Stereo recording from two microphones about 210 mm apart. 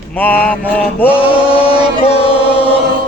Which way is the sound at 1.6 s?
25° left (ahead or behind).